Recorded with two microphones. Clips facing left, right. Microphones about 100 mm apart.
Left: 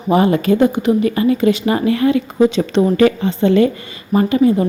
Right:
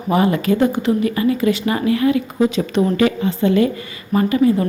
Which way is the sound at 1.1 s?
30° left (ahead or behind).